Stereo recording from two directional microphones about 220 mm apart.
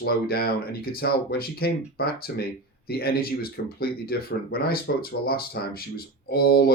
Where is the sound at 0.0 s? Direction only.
45° left (ahead or behind).